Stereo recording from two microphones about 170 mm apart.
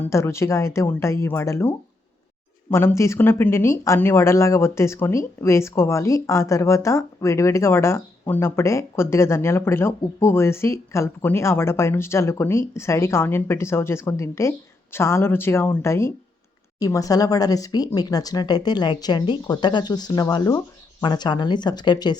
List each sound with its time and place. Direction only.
0.0 s speech: 15° left (ahead or behind)